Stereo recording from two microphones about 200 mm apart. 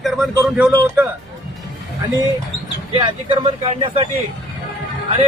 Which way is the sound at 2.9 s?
25° right (ahead or behind).